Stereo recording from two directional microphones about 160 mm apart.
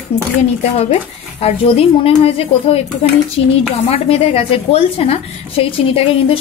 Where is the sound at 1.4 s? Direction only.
35° left (ahead or behind).